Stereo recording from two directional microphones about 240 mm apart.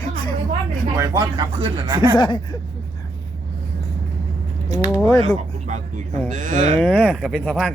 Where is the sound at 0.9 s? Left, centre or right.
Centre.